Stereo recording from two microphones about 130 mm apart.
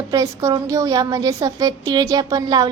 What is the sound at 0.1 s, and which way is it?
A woman's voice, 25° right (ahead or behind).